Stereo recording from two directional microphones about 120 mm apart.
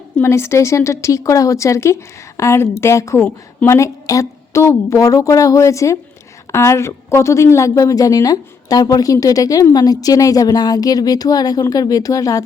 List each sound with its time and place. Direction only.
0.2 s speech: 20° left (ahead or behind)
3.2 s a woman's voice: 15° left (ahead or behind)
3.8 s speech: 25° left (ahead or behind)